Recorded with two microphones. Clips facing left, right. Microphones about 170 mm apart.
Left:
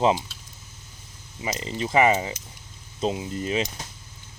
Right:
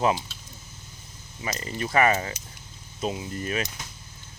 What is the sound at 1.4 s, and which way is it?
Speech, 20° left (ahead or behind).